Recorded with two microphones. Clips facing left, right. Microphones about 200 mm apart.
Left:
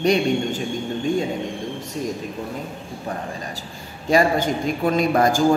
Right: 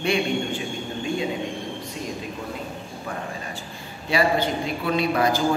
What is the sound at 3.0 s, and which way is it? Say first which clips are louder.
A man's voice: left 3 dB; 35° left (ahead or behind).